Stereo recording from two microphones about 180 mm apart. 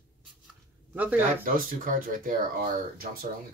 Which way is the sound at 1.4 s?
50° right (ahead or behind).